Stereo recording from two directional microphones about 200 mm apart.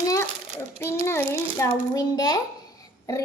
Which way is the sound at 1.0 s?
10° left (ahead or behind).